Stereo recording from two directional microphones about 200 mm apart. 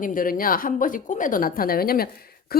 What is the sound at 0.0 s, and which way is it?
Speech, 45° left (ahead or behind).